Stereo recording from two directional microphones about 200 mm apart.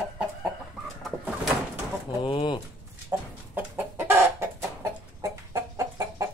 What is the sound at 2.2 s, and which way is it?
Pigeon, 20° left (ahead or behind).